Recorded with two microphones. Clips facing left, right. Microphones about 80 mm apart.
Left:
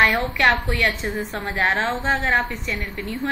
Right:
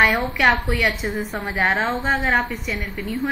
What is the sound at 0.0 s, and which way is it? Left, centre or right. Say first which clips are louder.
A woman's voice: right 1 dB; centre.